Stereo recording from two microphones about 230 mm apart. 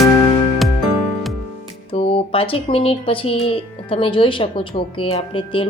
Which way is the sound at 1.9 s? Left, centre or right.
Left.